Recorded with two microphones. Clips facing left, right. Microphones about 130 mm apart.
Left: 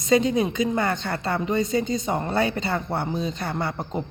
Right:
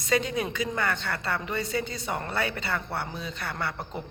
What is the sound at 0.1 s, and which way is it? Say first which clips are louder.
A woman's voice: left 7 dB; 20° left (ahead or behind).